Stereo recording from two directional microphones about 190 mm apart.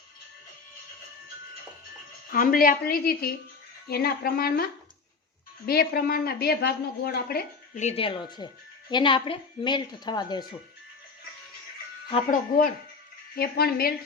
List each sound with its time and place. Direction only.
2.3 s a woman's voice: 50° left (ahead or behind)
5.6 s a woman's voice: 55° left (ahead or behind)
7.8 s a woman's voice: 35° left (ahead or behind)
12.3 s a woman's voice: 50° left (ahead or behind)